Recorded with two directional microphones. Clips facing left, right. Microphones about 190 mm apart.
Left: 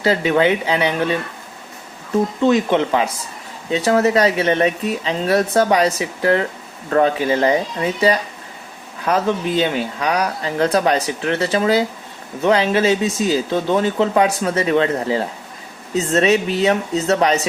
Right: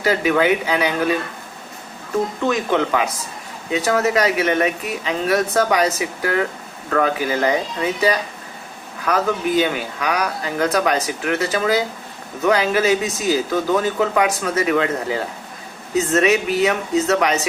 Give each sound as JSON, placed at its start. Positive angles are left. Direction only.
{"t": 0.0, "sound": "speech", "side_deg": 25}
{"t": 2.5, "sound": "speech", "side_deg": 25}
{"t": 9.0, "sound": "speech", "side_deg": 25}